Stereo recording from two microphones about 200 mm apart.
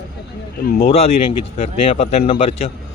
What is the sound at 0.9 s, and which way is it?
Speech, 30° left (ahead or behind).